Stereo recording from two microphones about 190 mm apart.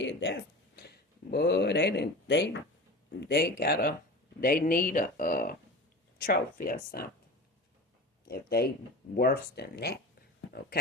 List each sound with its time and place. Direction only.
0.0 s speech: 70° left (ahead or behind); by 7.1 s 50° left (ahead or behind)
8.3 s speech: 55° left (ahead or behind)